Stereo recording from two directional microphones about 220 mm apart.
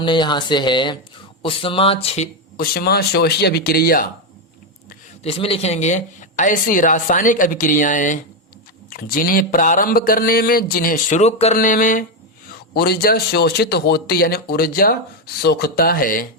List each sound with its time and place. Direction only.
0.0 s speech: 20° left (ahead or behind)
2.6 s a man's voice: 45° left (ahead or behind)
5.2 s a man's voice: 25° left (ahead or behind)